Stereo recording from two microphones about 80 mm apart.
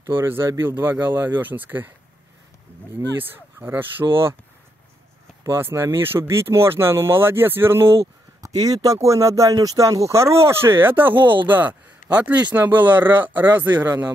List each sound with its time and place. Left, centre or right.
0.1 s speech: right
3.2 s speech: right
5.4 s speech: right
8.4 s speech: right
11.1 s speech: right
11.4 s speech: right